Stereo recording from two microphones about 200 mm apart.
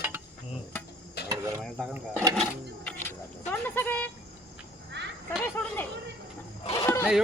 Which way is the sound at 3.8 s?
10° left (ahead or behind).